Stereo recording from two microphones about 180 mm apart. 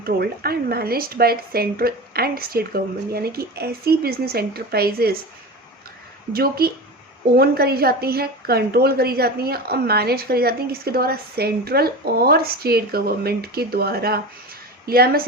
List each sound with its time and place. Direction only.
0.0 s a woman's voice: 60° right (ahead or behind)
6.3 s a woman's voice: 55° right (ahead or behind)